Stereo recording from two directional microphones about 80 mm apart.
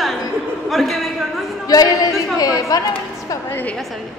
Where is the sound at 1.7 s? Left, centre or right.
Left.